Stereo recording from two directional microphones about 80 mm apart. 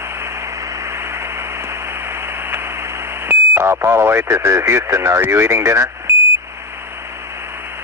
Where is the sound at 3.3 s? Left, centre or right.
Right.